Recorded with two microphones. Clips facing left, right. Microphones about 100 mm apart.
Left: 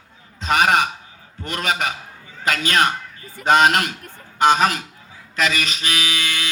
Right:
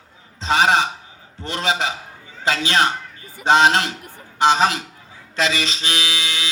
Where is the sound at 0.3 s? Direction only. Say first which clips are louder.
Even; 25° right (ahead or behind).